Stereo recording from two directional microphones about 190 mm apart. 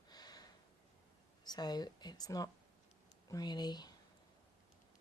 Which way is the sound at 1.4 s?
20° left (ahead or behind).